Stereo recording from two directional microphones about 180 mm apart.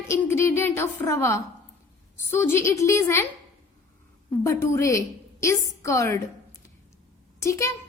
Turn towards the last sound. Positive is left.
turn(degrees=15)  # may be behind; listen again after turning